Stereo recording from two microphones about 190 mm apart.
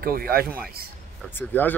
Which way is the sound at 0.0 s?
50° right (ahead or behind).